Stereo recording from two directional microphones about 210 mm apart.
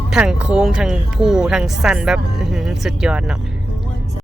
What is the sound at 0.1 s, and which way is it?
Speech, 5° right (ahead or behind).